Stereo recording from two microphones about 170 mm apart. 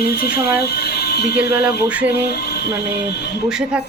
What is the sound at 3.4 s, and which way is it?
Speech, 5° right (ahead or behind).